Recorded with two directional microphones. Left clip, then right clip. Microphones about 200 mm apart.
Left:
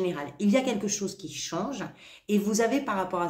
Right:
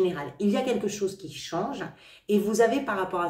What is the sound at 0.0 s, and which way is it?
A woman's voice, 30° left (ahead or behind).